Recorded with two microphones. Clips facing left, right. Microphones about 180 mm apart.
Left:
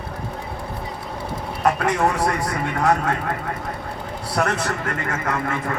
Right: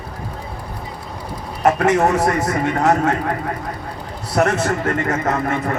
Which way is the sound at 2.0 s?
45° right (ahead or behind).